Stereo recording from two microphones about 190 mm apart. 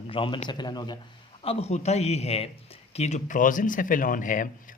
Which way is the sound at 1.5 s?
35° left (ahead or behind).